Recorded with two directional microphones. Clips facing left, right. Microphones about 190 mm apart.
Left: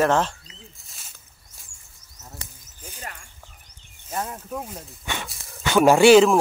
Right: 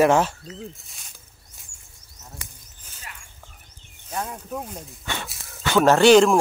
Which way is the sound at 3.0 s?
45° left (ahead or behind).